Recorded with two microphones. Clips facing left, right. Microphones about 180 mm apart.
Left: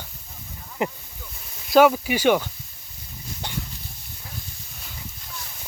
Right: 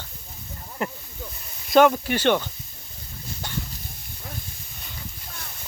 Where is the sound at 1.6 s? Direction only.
5° left (ahead or behind).